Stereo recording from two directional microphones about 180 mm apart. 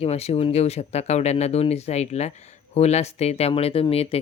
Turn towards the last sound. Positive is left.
turn(degrees=35)  # may be behind; listen again after turning